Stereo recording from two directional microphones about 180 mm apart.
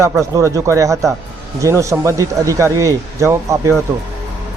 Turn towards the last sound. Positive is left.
turn(degrees=-15)  # may be behind; listen again after turning